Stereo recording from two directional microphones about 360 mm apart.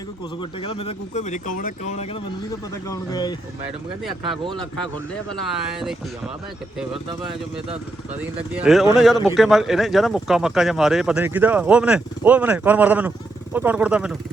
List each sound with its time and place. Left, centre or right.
0.6 s speech: centre
8.2 s speech: centre